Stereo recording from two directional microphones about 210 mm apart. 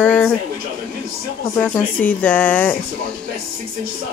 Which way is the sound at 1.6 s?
10° left (ahead or behind).